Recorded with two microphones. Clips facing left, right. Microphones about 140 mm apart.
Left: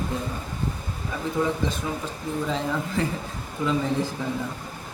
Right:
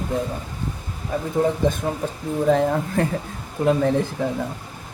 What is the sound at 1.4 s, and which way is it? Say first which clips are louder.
Speech: right 6 dB; 55° right (ahead or behind).